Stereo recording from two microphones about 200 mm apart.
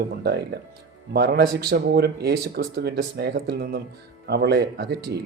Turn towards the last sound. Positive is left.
turn(degrees=-55)  # may be behind; listen again after turning